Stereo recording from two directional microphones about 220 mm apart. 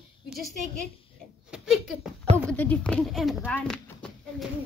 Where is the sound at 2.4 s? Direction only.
5° left (ahead or behind).